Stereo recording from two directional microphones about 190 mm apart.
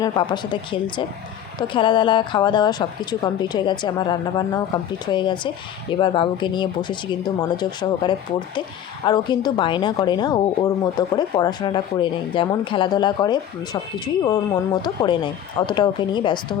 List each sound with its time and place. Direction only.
0.0 s a woman's voice: 25° left (ahead or behind)